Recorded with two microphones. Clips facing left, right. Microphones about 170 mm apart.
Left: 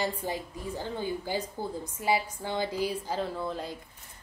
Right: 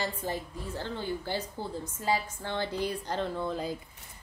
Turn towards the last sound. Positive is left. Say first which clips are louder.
# right 2 dB
turn(degrees=0)  # may be behind; listen again after turning